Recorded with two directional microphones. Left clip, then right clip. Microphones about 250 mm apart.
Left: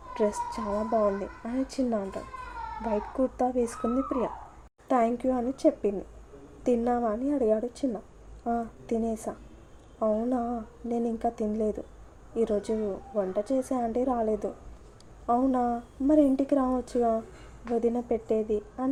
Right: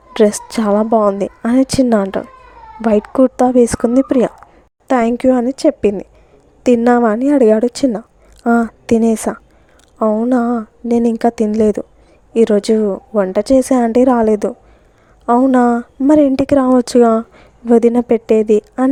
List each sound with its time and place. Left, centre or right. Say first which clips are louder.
0.1 s a woman's voice: right 15 dB; right
15.5 s a woman's voice: right 15 dB; right